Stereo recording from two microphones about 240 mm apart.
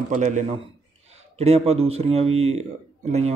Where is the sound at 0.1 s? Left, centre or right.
Right.